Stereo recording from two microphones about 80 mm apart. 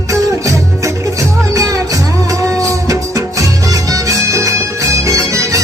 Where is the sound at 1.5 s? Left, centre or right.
Right.